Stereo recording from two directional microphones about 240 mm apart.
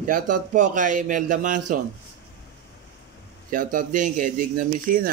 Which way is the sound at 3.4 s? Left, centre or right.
Right.